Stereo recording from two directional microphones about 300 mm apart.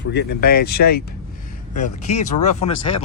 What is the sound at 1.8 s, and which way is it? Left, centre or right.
Speech, left.